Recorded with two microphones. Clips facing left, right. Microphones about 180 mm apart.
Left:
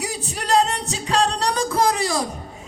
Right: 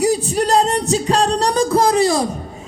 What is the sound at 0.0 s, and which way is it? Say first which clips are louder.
Music: right 13 dB; 40° right (ahead or behind).